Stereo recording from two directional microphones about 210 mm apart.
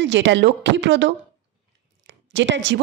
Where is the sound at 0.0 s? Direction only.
60° right (ahead or behind).